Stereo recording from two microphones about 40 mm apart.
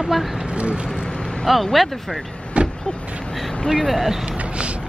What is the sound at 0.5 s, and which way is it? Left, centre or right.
Speech, right.